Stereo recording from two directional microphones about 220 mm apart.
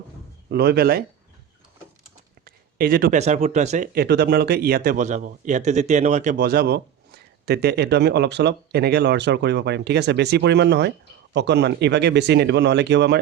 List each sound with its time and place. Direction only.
0.5 s speech: 45° right (ahead or behind)
2.4 s speech: 40° right (ahead or behind)
3.9 s speech: 45° right (ahead or behind)